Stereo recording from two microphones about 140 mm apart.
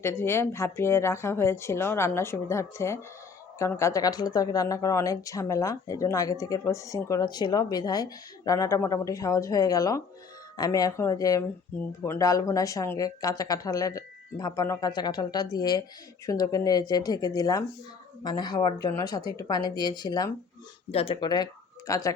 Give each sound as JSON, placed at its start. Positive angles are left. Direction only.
{"t": 0.0, "sound": "a woman's voice", "side_deg": 15}
{"t": 11.7, "sound": "a woman's voice", "side_deg": 15}
{"t": 20.9, "sound": "speech", "side_deg": 45}